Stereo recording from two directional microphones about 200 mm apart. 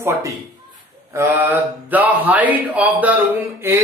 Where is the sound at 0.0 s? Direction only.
10° right (ahead or behind).